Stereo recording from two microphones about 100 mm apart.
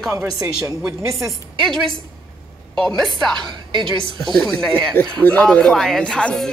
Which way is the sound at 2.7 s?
5° left (ahead or behind).